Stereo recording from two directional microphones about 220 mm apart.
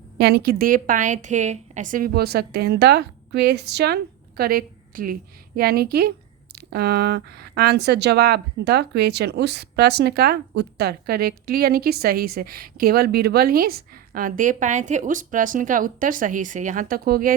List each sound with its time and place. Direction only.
0.2 s speech: 50° right (ahead or behind)